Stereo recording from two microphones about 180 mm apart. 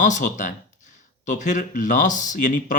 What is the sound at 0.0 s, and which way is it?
Speech, 45° left (ahead or behind).